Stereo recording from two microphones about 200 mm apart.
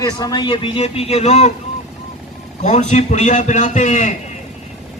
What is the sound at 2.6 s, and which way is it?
Speech, 35° left (ahead or behind).